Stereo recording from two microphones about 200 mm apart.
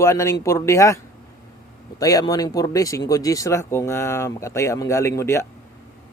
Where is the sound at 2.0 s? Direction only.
20° left (ahead or behind).